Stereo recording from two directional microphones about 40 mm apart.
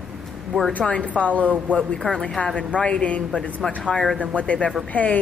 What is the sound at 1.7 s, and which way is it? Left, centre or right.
A woman's voice, centre.